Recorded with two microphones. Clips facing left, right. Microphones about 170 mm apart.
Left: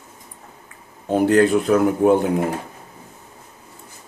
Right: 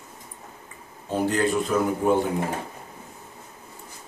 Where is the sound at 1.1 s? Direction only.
65° left (ahead or behind).